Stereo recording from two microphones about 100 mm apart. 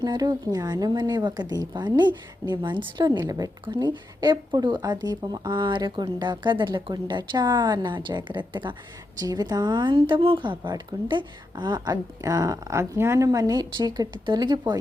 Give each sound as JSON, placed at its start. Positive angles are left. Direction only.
{"t": 0.0, "sound": "speech", "side_deg": -45}
{"t": 3.2, "sound": "speech", "side_deg": -40}
{"t": 9.1, "sound": "speech", "side_deg": -40}